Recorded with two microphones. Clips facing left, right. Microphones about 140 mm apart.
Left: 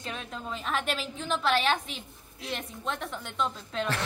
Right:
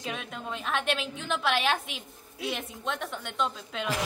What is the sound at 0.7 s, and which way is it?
A woman's voice, centre (ahead or behind).